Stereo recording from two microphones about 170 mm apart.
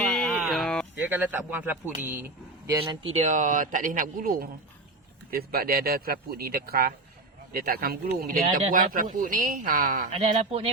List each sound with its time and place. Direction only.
0.0 s a sound: 5° left (ahead or behind)
1.1 s speech: 10° right (ahead or behind)
3.1 s speech: 40° right (ahead or behind)
10.1 s speech: 35° right (ahead or behind)